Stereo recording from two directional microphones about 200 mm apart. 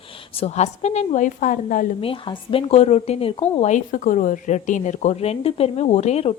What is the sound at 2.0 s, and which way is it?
Speech, 25° left (ahead or behind).